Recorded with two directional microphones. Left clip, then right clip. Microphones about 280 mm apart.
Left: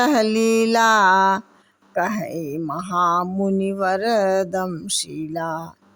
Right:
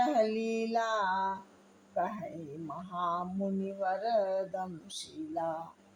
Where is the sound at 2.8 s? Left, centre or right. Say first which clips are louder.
Left 15 dB; left.